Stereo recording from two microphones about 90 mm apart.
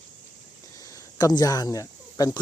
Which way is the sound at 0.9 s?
45° left (ahead or behind).